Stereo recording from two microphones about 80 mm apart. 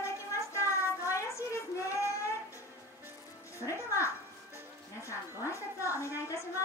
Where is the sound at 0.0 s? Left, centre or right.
Left.